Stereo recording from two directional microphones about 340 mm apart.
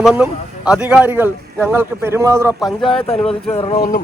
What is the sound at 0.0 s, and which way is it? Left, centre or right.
Speech, centre.